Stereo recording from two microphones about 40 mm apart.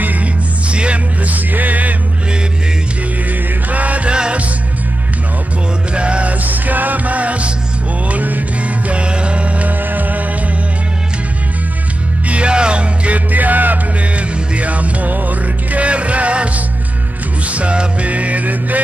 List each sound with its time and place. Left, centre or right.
0.0 s music: right
0.7 s music: right
1.2 s music: right
3.7 s music: right
4.1 s music: right
5.9 s music: right
6.4 s music: right
8.9 s music: right
12.3 s music: right
13.3 s music: right
14.1 s music: right